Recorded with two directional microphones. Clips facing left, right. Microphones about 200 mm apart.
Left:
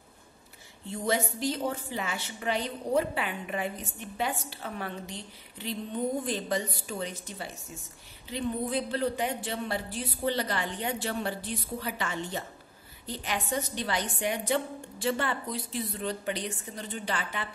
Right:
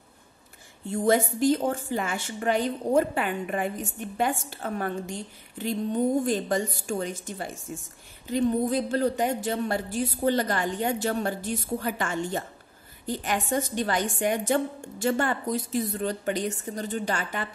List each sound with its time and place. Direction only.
0.8 s a woman's voice: 50° right (ahead or behind)